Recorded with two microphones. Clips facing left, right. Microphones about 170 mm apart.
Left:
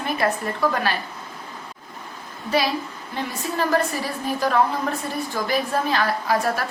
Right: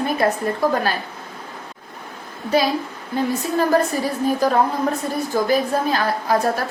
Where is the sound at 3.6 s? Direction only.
40° right (ahead or behind).